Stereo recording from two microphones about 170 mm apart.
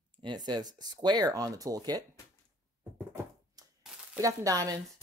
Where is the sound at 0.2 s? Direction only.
25° right (ahead or behind).